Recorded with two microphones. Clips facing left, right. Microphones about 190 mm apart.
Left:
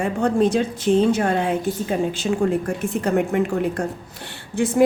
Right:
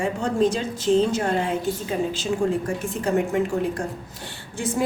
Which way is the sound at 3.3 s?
60° left (ahead or behind).